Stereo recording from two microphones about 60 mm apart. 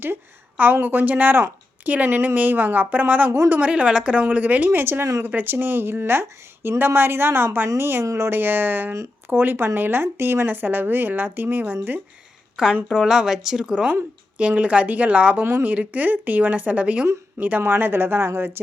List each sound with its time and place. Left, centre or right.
0.0 s a woman's voice: right
12.6 s a woman's voice: centre
15.4 s speech: right
15.7 s a woman's voice: right